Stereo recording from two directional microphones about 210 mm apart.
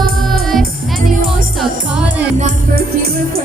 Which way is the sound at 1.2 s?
40° right (ahead or behind).